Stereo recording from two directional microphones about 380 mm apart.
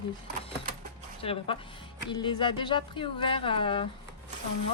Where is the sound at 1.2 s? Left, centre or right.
Centre.